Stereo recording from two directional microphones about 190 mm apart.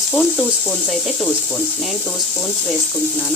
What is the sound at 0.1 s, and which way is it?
Speech, 10° left (ahead or behind).